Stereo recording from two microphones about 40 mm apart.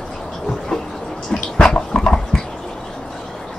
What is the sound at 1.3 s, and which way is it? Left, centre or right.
Dog, centre.